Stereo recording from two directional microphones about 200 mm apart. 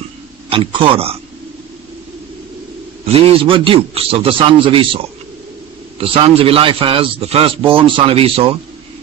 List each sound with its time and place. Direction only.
0.5 s a man's voice: 25° right (ahead or behind)
3.1 s a man's voice: 25° right (ahead or behind)
6.0 s a man's voice: 30° right (ahead or behind)